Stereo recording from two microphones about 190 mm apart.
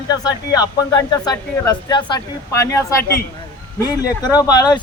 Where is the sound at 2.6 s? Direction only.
15° left (ahead or behind).